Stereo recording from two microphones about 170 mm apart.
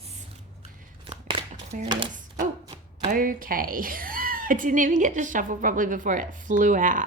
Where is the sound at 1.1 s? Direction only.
30° right (ahead or behind).